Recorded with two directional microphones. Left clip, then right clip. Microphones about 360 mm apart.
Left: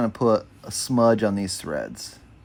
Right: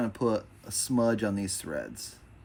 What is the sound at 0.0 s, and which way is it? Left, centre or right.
Speech, left.